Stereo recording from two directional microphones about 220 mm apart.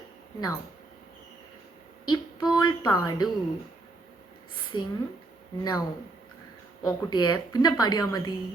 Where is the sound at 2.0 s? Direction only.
20° left (ahead or behind).